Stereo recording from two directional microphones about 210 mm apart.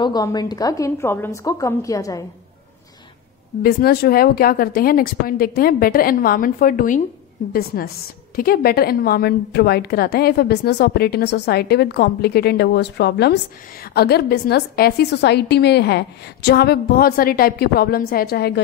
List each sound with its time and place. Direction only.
0.0 s a woman's voice: 20° left (ahead or behind)
3.6 s a woman's voice: 50° left (ahead or behind)